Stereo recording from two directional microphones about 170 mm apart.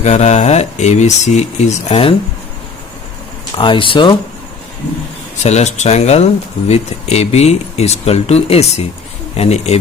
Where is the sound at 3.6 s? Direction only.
30° left (ahead or behind).